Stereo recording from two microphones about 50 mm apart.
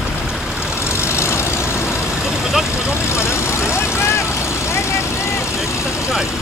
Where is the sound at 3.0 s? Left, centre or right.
Left.